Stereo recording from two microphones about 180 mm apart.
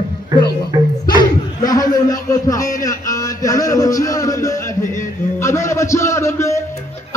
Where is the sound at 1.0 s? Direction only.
25° left (ahead or behind).